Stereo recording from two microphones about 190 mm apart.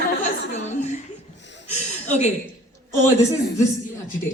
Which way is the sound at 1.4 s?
70° left (ahead or behind).